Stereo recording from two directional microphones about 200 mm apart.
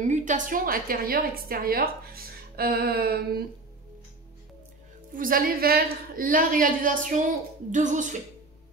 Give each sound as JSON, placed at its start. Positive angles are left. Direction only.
{"t": 0.0, "sound": "a woman's voice", "side_deg": -35}
{"t": 5.1, "sound": "a woman's voice", "side_deg": -45}